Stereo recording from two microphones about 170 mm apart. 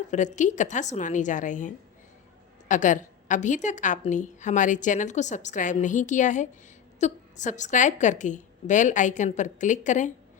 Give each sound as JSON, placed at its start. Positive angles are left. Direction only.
{"t": 0.1, "sound": "a woman's voice", "side_deg": 45}